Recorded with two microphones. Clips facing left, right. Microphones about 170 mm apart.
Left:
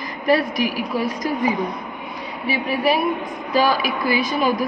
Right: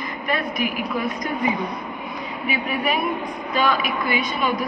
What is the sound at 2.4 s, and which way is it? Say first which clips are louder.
A woman's voice: left 4 dB; 35° left (ahead or behind).